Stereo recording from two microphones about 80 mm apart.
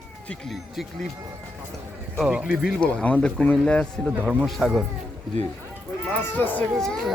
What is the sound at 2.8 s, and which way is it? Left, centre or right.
Speech, centre.